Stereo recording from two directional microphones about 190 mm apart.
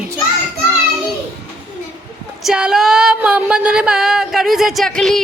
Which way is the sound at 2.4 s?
5° right (ahead or behind).